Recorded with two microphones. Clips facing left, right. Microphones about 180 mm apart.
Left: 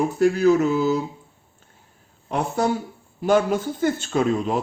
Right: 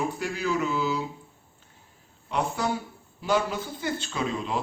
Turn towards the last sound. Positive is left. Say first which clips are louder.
# left 8 dB
turn(degrees=45)  # may be behind; listen again after turning